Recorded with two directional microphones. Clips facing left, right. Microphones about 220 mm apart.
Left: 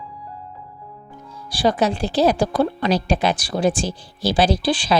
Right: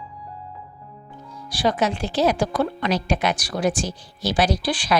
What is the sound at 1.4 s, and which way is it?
Speech, 35° left (ahead or behind).